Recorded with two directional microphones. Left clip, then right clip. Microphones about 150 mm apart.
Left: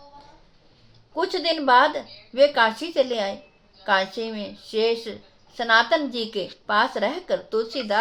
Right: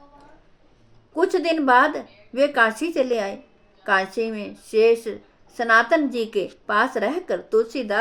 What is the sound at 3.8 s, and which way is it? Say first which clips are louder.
A woman's voice: right 1 dB; 40° right (ahead or behind).